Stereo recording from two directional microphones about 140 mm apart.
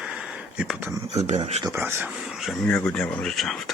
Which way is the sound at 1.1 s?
50° right (ahead or behind).